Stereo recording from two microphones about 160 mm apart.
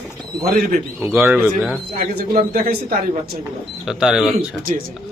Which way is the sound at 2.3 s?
65° right (ahead or behind).